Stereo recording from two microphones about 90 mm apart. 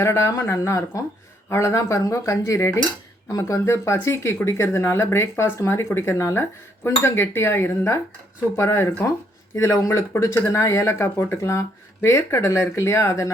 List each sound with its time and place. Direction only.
0.0 s speech: 30° left (ahead or behind)